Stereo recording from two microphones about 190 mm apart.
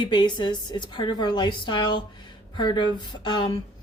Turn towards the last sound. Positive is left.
turn(degrees=25)  # may be behind; listen again after turning